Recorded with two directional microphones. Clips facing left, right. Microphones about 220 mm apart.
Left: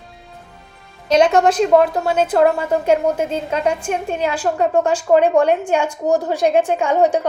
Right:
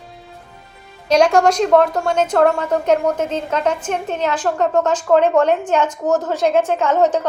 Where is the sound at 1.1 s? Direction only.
5° left (ahead or behind).